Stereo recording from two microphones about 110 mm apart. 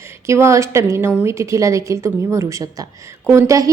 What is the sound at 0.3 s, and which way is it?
A woman's voice, 25° right (ahead or behind).